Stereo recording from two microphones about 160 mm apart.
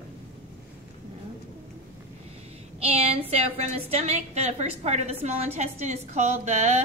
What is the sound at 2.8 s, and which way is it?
A woman's voice, 40° right (ahead or behind).